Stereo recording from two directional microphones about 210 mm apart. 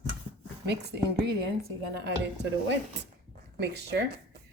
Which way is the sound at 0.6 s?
50° right (ahead or behind).